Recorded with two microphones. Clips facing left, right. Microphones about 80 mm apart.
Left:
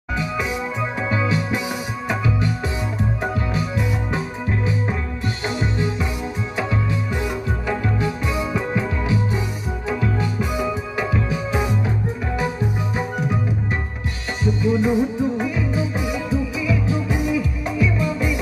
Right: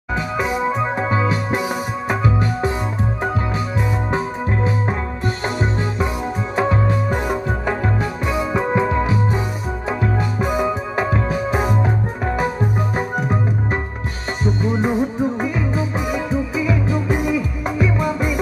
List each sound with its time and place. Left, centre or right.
0.1 s music: right
4.1 s music: right
14.6 s music: right